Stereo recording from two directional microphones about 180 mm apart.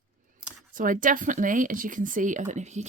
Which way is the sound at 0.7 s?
50° right (ahead or behind).